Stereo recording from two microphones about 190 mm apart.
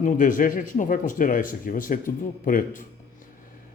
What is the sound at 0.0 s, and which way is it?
Speech, 45° left (ahead or behind).